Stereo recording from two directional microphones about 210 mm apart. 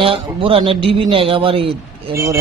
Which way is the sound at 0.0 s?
25° right (ahead or behind).